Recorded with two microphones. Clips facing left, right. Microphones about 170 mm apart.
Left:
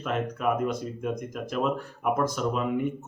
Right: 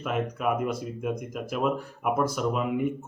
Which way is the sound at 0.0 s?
5° right (ahead or behind).